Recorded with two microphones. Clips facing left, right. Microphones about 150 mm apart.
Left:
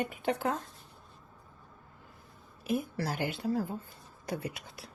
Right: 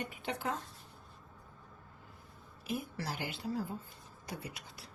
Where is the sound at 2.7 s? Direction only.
50° left (ahead or behind).